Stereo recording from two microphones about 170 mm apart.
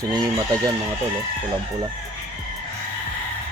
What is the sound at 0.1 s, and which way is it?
Speech, 20° right (ahead or behind).